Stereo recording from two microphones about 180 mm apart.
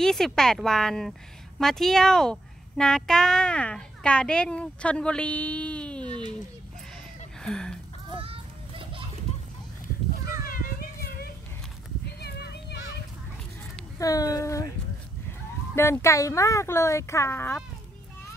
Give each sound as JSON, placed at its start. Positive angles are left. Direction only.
{"t": 0.0, "sound": "a child's voice", "side_deg": 5}
{"t": 7.3, "sound": "speech", "side_deg": 5}
{"t": 8.1, "sound": "children playing", "side_deg": -30}
{"t": 10.4, "sound": "children playing", "side_deg": 55}
{"t": 12.2, "sound": "a sound", "side_deg": 65}
{"t": 13.9, "sound": "speech", "side_deg": 20}
{"t": 15.7, "sound": "a woman's voice", "side_deg": 15}